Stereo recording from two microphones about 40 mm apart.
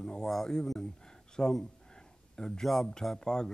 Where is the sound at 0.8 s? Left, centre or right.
Centre.